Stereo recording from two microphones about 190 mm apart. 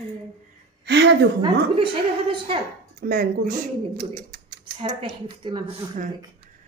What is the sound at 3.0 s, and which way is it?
Speech, 50° right (ahead or behind).